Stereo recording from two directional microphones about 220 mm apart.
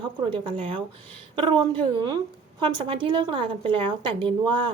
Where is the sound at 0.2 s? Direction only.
20° right (ahead or behind).